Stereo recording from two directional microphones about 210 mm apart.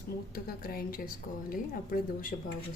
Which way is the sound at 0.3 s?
45° left (ahead or behind).